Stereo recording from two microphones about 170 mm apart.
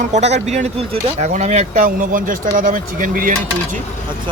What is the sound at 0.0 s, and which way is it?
Speech, 45° right (ahead or behind).